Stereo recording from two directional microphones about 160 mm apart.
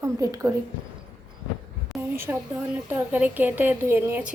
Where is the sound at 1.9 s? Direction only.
15° right (ahead or behind).